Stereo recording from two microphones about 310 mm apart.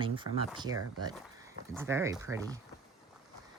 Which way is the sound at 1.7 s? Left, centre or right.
Centre.